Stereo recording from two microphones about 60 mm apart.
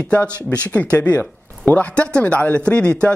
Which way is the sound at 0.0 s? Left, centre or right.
Left.